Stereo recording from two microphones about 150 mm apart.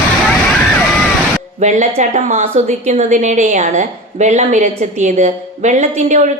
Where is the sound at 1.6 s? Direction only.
50° right (ahead or behind).